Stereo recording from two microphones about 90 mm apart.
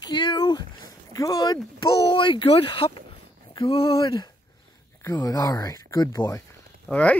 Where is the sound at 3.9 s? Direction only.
45° left (ahead or behind).